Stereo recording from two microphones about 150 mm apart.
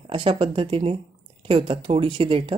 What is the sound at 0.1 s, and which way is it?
Speech, 35° right (ahead or behind).